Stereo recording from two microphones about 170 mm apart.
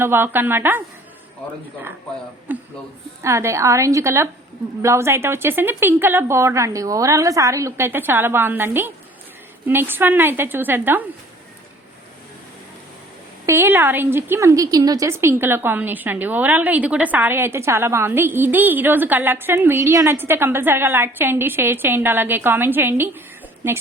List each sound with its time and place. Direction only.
0.0 s a woman's voice: 15° right (ahead or behind)
2.5 s a sound: 10° right (ahead or behind)
3.2 s a woman's voice: 15° right (ahead or behind)
13.4 s a woman's voice: 15° right (ahead or behind)